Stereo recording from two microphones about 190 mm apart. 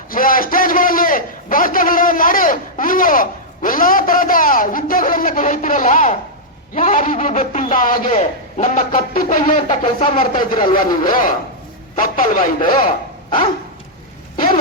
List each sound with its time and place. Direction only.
0.1 s a man's voice: 45° left (ahead or behind)
9.8 s a sound: 25° left (ahead or behind)
10.8 s speech: 45° left (ahead or behind)